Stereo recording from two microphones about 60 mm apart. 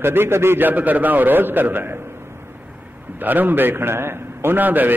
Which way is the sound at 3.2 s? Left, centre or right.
Right.